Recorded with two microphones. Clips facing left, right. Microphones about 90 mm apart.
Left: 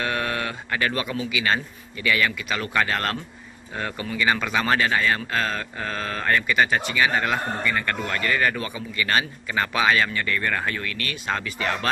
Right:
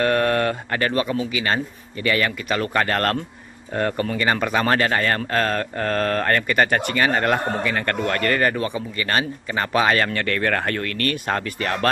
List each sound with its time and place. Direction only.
0.0 s speech: 45° right (ahead or behind)
10.1 s speech: 70° right (ahead or behind); by 11.9 s 50° right (ahead or behind)